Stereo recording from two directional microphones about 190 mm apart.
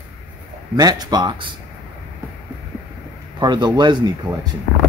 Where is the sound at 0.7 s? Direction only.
20° right (ahead or behind).